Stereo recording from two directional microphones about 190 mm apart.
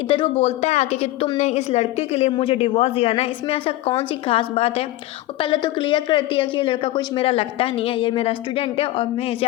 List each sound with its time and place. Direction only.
0.1 s a woman's voice: 30° left (ahead or behind)